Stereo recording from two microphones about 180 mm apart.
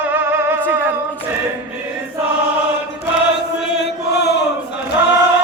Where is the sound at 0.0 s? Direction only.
10° right (ahead or behind).